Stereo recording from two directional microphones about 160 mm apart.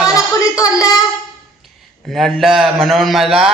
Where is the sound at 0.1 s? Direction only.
20° left (ahead or behind).